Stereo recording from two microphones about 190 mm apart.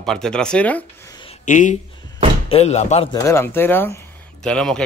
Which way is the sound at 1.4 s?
40° left (ahead or behind).